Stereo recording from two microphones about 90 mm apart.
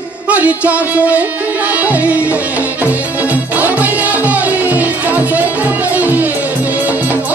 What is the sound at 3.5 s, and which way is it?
Music, 20° right (ahead or behind).